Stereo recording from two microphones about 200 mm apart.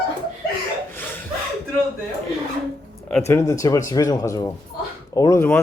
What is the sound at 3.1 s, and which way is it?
Speech, 15° left (ahead or behind).